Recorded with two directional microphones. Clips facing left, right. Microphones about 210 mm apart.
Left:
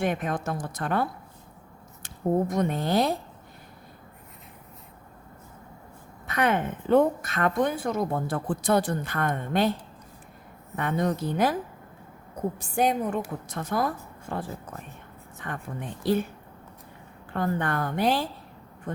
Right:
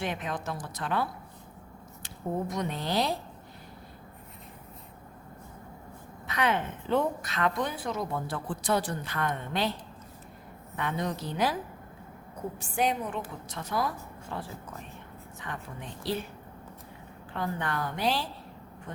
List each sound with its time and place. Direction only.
0.0 s a woman's voice: 50° left (ahead or behind)
6.2 s a woman's voice: 50° left (ahead or behind)
10.8 s a woman's voice: 50° left (ahead or behind)
12.5 s a woman's voice: 45° left (ahead or behind)
17.3 s a woman's voice: 50° left (ahead or behind)